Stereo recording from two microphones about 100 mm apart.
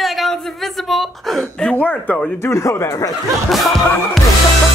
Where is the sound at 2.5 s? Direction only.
30° left (ahead or behind).